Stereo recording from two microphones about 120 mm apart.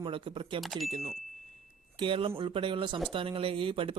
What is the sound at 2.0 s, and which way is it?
Speech, 50° right (ahead or behind).